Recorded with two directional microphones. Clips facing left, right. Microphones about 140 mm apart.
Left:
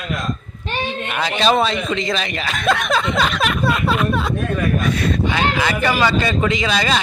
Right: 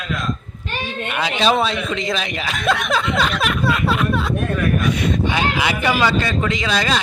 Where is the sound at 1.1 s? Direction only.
5° right (ahead or behind).